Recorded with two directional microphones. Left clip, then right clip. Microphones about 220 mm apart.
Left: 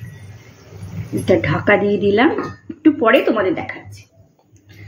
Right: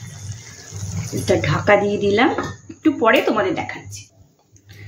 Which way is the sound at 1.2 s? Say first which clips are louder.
Left 2 dB; centre (ahead or behind).